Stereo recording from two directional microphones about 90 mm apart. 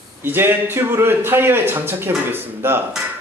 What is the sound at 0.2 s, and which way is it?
A man's voice, 25° right (ahead or behind).